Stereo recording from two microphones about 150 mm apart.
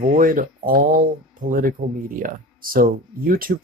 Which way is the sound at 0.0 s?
65° right (ahead or behind).